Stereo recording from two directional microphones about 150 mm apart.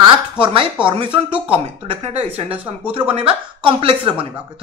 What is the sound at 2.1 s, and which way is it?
Speech, 45° right (ahead or behind).